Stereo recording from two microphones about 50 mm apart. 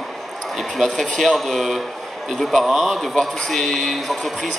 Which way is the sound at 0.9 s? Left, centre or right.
Centre.